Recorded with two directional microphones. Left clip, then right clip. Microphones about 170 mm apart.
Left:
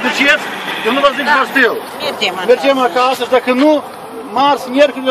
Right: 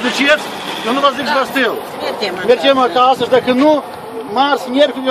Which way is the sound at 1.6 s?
55° right (ahead or behind).